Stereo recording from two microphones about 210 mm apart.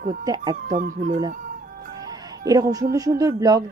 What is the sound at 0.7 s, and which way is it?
Speech, 40° right (ahead or behind).